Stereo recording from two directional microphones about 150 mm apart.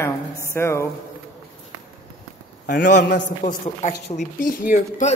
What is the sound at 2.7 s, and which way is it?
A man's voice, 60° left (ahead or behind).